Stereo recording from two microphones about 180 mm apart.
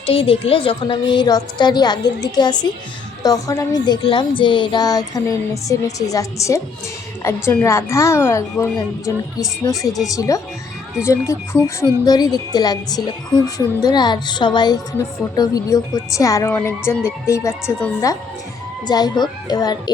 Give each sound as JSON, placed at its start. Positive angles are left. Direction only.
{"t": 0.0, "sound": "a woman's voice", "side_deg": 30}